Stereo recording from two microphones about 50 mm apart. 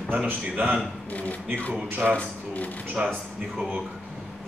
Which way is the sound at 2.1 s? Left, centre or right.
Left.